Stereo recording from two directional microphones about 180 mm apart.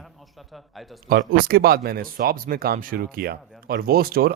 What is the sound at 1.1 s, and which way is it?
Speech, 55° right (ahead or behind).